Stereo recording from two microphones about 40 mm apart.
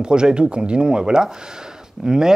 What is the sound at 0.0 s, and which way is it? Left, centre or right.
Speech, right.